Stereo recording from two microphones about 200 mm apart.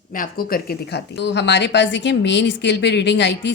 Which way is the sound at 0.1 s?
45° left (ahead or behind).